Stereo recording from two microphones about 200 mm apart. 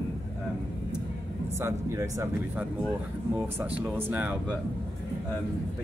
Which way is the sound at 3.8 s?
10° right (ahead or behind).